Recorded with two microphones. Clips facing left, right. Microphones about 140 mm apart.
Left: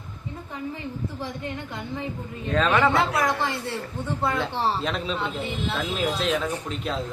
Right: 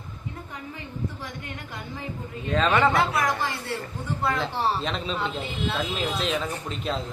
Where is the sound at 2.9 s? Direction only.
25° left (ahead or behind).